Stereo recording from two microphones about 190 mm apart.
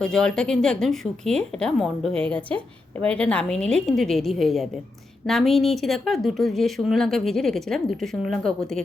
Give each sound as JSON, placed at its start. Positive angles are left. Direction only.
{"t": 0.0, "sound": "a woman's voice", "side_deg": 5}